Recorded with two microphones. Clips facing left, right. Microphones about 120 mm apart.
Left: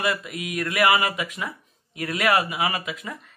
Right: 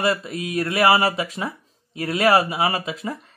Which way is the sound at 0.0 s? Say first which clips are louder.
Right 4 dB; 30° right (ahead or behind).